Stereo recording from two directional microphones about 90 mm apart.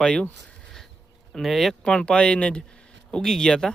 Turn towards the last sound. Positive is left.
turn(degrees=10)  # may be behind; listen again after turning